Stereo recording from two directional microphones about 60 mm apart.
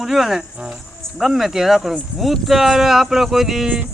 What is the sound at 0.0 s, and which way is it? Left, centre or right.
Speech, centre.